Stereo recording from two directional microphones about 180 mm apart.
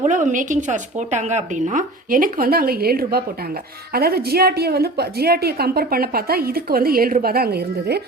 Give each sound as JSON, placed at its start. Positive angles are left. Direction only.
{"t": 0.0, "sound": "a woman's voice", "side_deg": -45}